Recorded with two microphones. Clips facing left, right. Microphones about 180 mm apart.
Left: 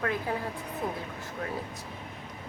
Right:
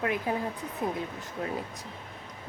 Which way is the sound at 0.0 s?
20° right (ahead or behind).